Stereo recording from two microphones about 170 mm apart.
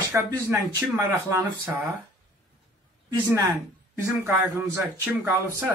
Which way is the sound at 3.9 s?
15° right (ahead or behind).